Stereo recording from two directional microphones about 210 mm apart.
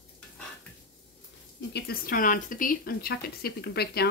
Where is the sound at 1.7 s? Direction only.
45° left (ahead or behind).